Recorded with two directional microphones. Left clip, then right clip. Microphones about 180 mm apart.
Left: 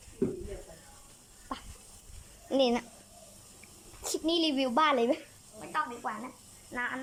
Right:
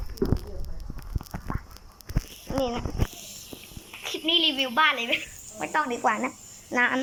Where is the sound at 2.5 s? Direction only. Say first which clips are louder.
Left 1 dB; 20° left (ahead or behind).